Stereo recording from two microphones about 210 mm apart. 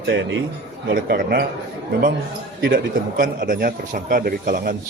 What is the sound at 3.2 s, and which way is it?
Speech, 40° right (ahead or behind).